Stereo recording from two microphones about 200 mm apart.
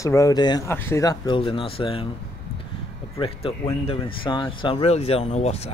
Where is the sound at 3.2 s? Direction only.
25° left (ahead or behind).